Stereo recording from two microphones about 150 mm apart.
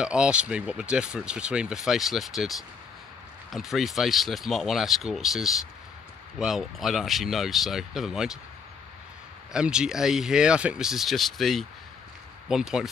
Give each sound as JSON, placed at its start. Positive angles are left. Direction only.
{"t": 0.0, "sound": "speech", "side_deg": -5}
{"t": 9.5, "sound": "speech", "side_deg": -5}